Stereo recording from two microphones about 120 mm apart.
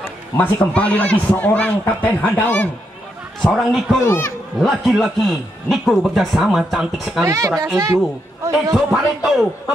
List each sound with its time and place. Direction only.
0.4 s a man's voice: 10° left (ahead or behind)
3.4 s a man's voice: centre (ahead or behind)
4.0 s speech: 20° left (ahead or behind)
4.6 s a man's voice: centre (ahead or behind)
7.2 s speech: 25° right (ahead or behind)
8.7 s a man's voice: centre (ahead or behind)